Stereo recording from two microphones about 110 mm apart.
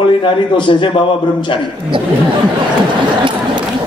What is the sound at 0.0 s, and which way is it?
A man's voice, 50° left (ahead or behind).